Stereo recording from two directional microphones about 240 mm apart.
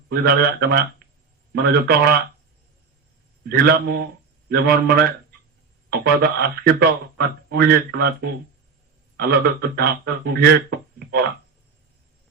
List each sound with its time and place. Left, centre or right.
0.1 s speech: right
3.4 s speech: right